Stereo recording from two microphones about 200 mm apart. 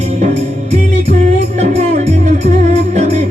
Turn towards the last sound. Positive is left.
turn(degrees=-35)  # may be behind; listen again after turning